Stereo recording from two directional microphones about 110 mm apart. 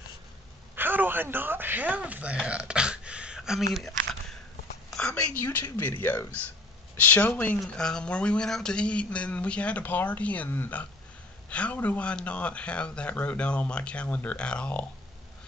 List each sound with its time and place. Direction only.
0.7 s a man's voice: 20° right (ahead or behind)
3.7 s a sound: centre (ahead or behind)
4.9 s speech: 10° left (ahead or behind)